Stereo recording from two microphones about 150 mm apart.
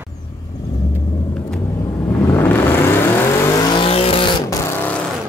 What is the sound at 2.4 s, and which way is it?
Vehicle, 15° left (ahead or behind).